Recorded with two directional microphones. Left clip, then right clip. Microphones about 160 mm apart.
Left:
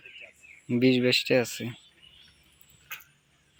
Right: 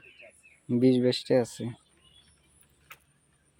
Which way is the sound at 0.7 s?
20° right (ahead or behind).